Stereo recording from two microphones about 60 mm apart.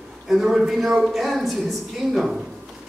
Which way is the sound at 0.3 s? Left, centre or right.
Centre.